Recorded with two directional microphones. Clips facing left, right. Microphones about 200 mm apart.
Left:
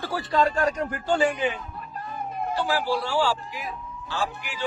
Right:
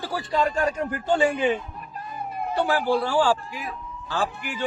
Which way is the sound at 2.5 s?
55° right (ahead or behind).